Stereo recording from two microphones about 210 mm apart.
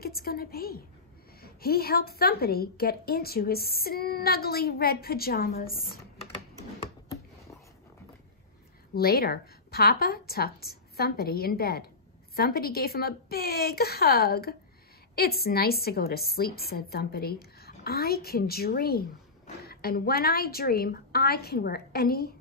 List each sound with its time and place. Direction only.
0.0 s a woman's voice: 45° left (ahead or behind)
8.9 s a woman's voice: 45° left (ahead or behind)